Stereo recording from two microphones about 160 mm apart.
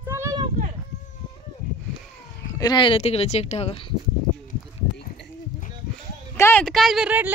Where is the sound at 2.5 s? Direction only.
25° left (ahead or behind).